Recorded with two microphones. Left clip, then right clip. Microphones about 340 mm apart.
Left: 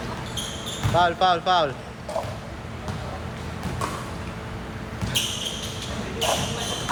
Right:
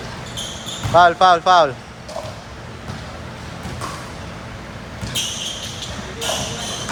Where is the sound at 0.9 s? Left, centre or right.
Centre.